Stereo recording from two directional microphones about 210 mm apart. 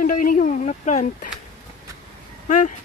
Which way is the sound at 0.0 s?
40° left (ahead or behind).